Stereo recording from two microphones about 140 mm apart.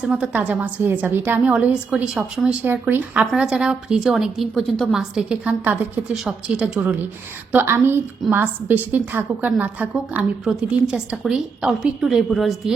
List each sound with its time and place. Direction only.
0.0 s a woman's voice: 5° right (ahead or behind)